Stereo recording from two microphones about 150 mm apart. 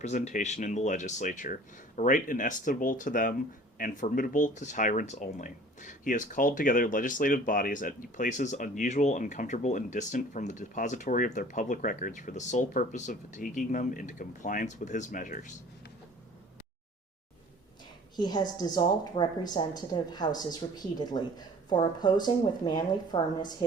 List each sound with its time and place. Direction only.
0.0 s speech: 50° left (ahead or behind)
18.2 s a woman's voice: 30° left (ahead or behind)